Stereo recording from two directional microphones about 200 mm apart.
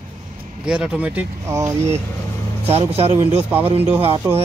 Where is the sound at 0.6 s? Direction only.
5° right (ahead or behind).